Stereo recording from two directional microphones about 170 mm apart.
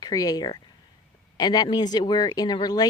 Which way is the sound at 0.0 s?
20° left (ahead or behind).